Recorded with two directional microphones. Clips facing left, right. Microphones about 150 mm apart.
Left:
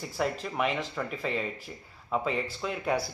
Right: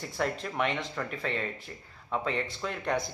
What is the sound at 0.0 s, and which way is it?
Speech, 5° left (ahead or behind).